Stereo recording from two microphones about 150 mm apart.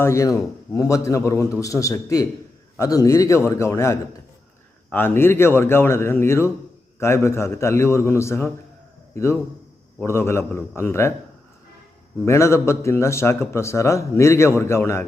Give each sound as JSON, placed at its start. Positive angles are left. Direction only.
{"t": 0.0, "sound": "a man's voice", "side_deg": 20}
{"t": 12.2, "sound": "a man's voice", "side_deg": 20}